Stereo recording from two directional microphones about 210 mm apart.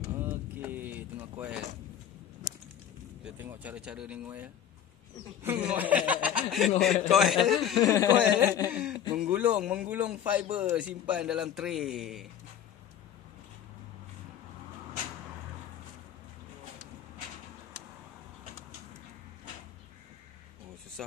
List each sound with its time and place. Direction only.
0.2 s vehicle: 10° right (ahead or behind)
3.3 s a man's voice: 10° right (ahead or behind)
7.8 s speech: 15° left (ahead or behind)
8.2 s a man's voice: 10° right (ahead or behind)